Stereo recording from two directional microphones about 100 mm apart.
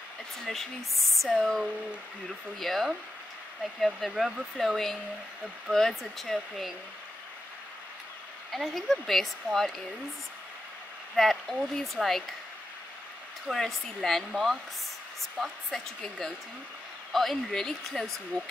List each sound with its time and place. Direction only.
0.5 s speech: centre (ahead or behind)
8.5 s speech: centre (ahead or behind)
11.1 s speech: centre (ahead or behind)
13.5 s speech: 5° left (ahead or behind)
15.7 s speech: 5° left (ahead or behind)